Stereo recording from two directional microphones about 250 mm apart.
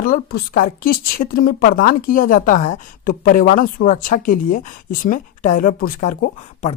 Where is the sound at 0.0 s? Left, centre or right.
Left.